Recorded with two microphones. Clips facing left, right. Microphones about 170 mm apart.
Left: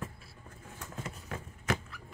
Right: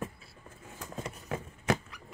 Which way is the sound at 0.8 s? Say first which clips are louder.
Right 3 dB; 15° right (ahead or behind).